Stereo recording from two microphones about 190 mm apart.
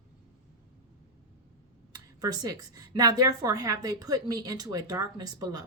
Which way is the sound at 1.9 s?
20° right (ahead or behind).